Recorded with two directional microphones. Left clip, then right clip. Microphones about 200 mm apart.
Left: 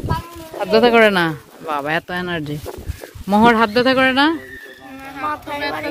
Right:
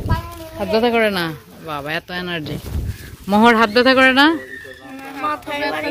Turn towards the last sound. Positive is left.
turn(degrees=30)  # may be behind; listen again after turning